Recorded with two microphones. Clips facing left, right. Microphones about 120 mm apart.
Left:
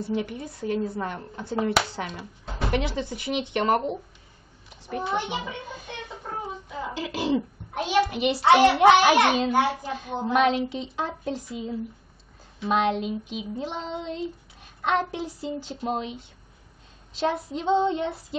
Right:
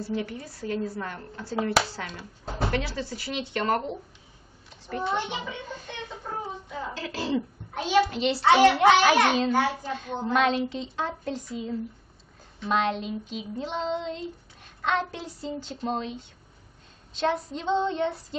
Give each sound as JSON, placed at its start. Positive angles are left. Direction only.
{"t": 0.0, "sound": "a woman's voice", "side_deg": 20}
{"t": 17.2, "sound": "a child's voice", "side_deg": 10}